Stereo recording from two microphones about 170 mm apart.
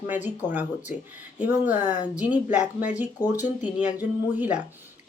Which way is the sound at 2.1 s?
10° right (ahead or behind).